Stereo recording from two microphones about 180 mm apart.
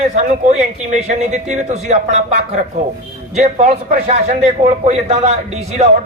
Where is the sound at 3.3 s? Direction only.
40° right (ahead or behind).